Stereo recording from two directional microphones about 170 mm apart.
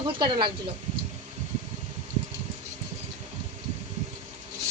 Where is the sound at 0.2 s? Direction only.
25° right (ahead or behind).